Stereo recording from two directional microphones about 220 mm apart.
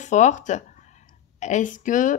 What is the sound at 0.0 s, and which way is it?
Speech, 35° left (ahead or behind).